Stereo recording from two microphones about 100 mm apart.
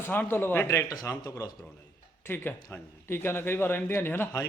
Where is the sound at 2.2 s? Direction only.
20° left (ahead or behind).